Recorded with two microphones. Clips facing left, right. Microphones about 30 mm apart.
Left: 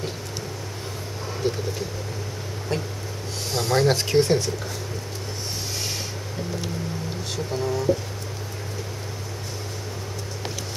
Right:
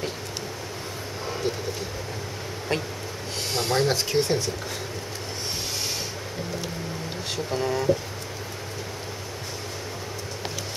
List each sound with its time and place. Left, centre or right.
2.7 s speech: right
3.7 s speech: centre
7.3 s speech: centre